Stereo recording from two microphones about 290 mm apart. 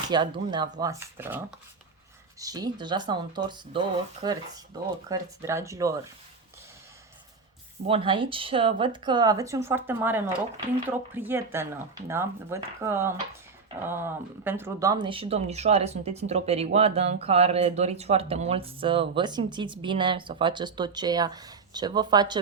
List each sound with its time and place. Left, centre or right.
0.1 s speech: centre
7.9 s speech: centre